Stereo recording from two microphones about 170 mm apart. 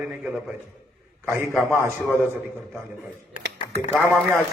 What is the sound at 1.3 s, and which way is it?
Speech, 15° right (ahead or behind).